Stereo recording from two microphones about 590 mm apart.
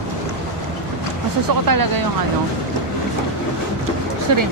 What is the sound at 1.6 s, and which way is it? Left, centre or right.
Speech, right.